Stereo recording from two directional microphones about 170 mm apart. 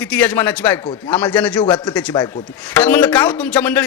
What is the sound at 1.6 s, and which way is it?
Speech, 25° left (ahead or behind).